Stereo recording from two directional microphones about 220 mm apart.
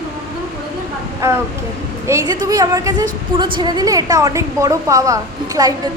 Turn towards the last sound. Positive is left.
turn(degrees=-15)  # may be behind; listen again after turning